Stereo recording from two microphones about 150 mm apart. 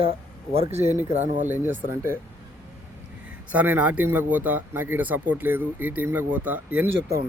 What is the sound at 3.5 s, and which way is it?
Speech, 10° right (ahead or behind).